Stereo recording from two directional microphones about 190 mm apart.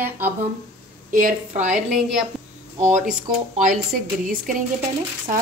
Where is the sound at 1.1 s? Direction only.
45° right (ahead or behind).